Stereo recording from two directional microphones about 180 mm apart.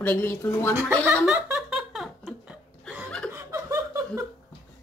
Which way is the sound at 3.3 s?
15° right (ahead or behind).